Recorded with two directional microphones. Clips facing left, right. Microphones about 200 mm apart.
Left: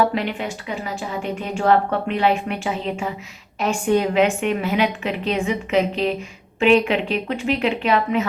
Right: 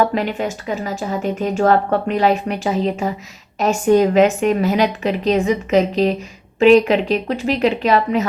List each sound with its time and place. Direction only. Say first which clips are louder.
0.1 s a woman's voice: right 4 dB; 40° right (ahead or behind)